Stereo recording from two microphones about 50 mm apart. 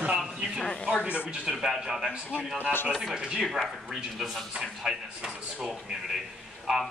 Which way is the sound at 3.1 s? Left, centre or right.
Centre.